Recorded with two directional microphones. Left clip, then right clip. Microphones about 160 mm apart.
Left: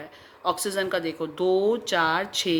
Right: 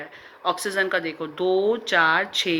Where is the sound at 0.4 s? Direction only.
50° left (ahead or behind).